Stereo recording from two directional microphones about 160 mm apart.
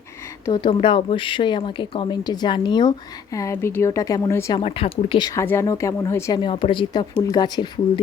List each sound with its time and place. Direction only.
0.4 s speech: 25° left (ahead or behind)
3.3 s speech: 20° left (ahead or behind)
4.5 s speech: 35° left (ahead or behind); by 6.4 s 15° left (ahead or behind)
6.4 s speech: 35° left (ahead or behind)